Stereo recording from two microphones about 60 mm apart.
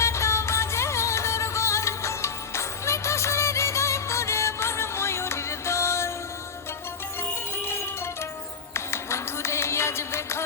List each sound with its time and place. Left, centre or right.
0.0 s music: left
7.5 s music: left